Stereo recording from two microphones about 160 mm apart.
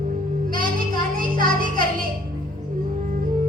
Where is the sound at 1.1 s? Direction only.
60° right (ahead or behind).